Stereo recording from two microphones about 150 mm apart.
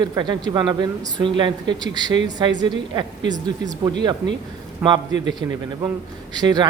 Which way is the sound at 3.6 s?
30° right (ahead or behind).